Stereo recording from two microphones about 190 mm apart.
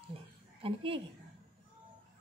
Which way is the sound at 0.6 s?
30° right (ahead or behind).